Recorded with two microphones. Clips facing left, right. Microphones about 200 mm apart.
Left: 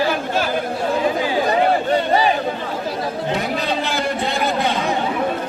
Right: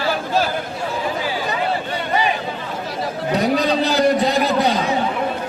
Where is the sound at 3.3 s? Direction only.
40° right (ahead or behind).